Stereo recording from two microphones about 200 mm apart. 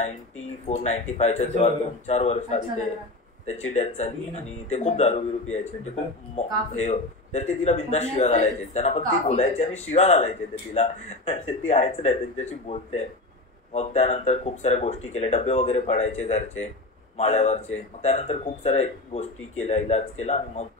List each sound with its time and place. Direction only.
0.7 s a man's voice: 35° left (ahead or behind)
3.7 s a man's voice: 35° left (ahead or behind)